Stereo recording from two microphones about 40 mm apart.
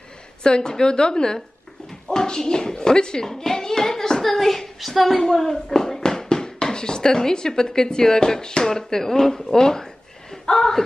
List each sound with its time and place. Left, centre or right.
0.4 s a woman's voice: left; by 5.2 s centre
5.2 s speech: centre